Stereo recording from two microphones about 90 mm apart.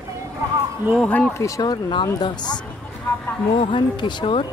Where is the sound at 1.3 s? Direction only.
35° left (ahead or behind); by 2.0 s 50° left (ahead or behind).